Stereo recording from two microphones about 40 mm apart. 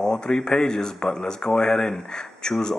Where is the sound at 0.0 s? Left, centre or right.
Centre.